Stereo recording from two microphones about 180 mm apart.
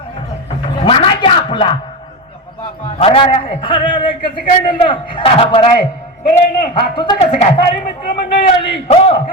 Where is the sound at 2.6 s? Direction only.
30° left (ahead or behind).